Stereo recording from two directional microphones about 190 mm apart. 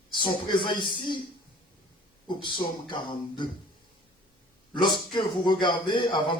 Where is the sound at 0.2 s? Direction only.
25° left (ahead or behind).